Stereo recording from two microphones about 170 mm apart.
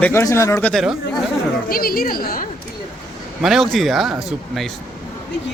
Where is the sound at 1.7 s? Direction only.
60° left (ahead or behind).